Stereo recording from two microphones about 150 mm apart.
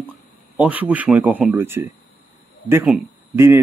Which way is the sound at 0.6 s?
10° right (ahead or behind).